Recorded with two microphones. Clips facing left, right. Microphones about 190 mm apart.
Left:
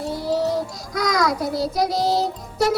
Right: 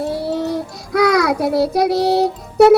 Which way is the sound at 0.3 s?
65° right (ahead or behind).